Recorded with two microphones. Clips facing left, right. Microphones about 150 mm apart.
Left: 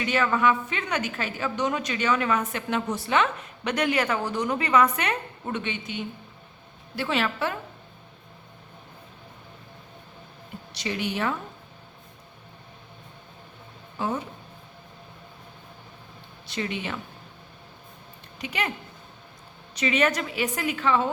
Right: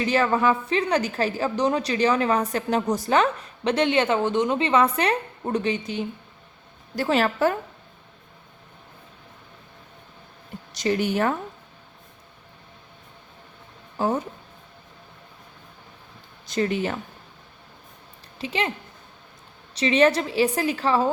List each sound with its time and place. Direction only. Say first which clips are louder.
0.0 s a woman's voice: right 2 dB; 35° right (ahead or behind)
10.8 s a woman's voice: right 6 dB; 45° right (ahead or behind)
14.0 s a woman's voice: right 5 dB; 40° right (ahead or behind)
16.5 s a woman's voice: right 7 dB; 45° right (ahead or behind)
18.3 s speech: right 4 dB; 30° right (ahead or behind)
19.7 s a woman's voice: right 5 dB; 30° right (ahead or behind)